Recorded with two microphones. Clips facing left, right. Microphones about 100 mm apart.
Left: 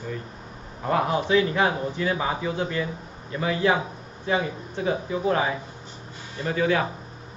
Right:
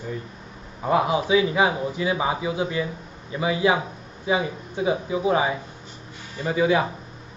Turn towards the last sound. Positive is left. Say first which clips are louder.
# right 3 dB
turn(degrees=-15)  # may be behind; listen again after turning